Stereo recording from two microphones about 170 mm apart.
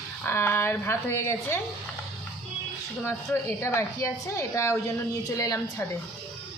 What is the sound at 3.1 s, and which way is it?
A woman's voice, 15° left (ahead or behind).